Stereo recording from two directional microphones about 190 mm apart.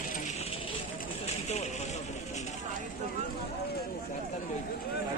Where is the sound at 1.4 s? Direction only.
35° left (ahead or behind).